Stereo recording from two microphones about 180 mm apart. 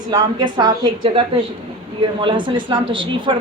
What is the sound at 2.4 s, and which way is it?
Speech, 25° right (ahead or behind).